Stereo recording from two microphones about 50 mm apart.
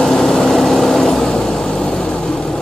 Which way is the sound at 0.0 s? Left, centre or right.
Centre.